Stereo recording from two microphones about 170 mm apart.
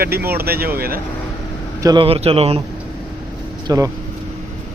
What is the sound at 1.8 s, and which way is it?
Speech, 20° right (ahead or behind).